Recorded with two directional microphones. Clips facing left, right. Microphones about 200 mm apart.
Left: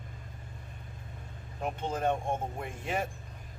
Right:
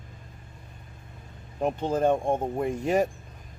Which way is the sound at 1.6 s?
35° right (ahead or behind).